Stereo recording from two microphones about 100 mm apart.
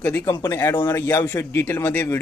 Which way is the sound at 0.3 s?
30° left (ahead or behind).